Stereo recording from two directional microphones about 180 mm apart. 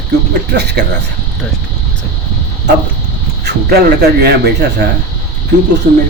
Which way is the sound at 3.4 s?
65° right (ahead or behind).